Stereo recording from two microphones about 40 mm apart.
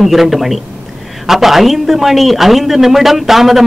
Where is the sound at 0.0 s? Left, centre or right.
Centre.